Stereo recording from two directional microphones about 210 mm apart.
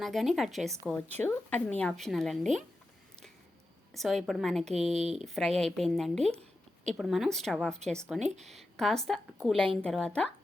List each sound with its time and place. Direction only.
0.0 s a woman's voice: centre (ahead or behind)
3.9 s a woman's voice: centre (ahead or behind)
4.9 s speech: 30° right (ahead or behind)
5.2 s a woman's voice: centre (ahead or behind)